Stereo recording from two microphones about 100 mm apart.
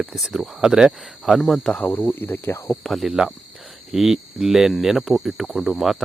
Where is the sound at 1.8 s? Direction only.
20° left (ahead or behind).